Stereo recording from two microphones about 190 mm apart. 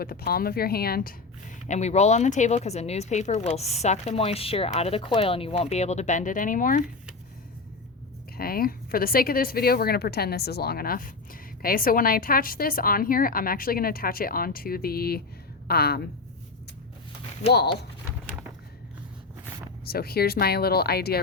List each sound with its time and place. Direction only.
0.0 s speech: 55° left (ahead or behind)
8.4 s speech: 50° left (ahead or behind)
19.9 s speech: 55° left (ahead or behind)